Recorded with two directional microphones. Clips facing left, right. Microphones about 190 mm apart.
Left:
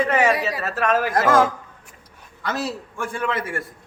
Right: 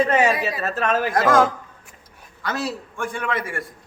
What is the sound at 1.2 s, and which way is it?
A man's voice, centre (ahead or behind).